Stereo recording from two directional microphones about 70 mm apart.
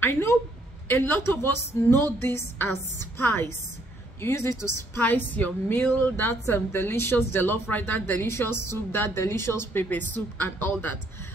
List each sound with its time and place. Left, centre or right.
0.0 s speech: left
5.0 s a woman's voice: left
9.8 s a woman's voice: left